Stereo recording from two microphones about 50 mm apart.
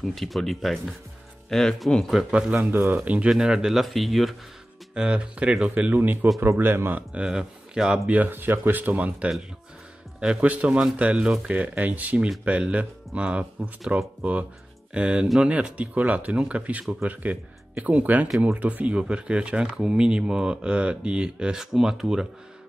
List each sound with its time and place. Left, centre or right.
0.0 s speech: centre
2.3 s speech: right
2.7 s speech: right
3.3 s speech: centre
3.8 s speech: centre
4.9 s speech: right
6.4 s speech: right
7.2 s speech: centre
8.3 s speech: right; by 22.3 s centre